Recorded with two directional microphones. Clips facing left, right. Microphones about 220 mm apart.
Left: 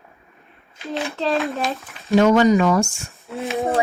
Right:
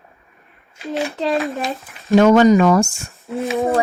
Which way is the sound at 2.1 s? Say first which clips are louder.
Right 3 dB; 50° right (ahead or behind).